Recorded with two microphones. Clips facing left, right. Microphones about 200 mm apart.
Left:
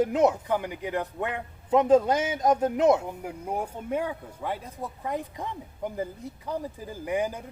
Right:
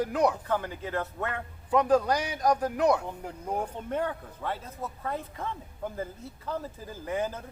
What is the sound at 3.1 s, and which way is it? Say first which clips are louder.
Speech: left 2 dB; 10° left (ahead or behind).